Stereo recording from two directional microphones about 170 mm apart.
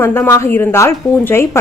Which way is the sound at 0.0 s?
15° left (ahead or behind).